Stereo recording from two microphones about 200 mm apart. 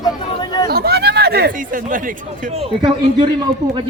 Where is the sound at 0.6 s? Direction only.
50° right (ahead or behind).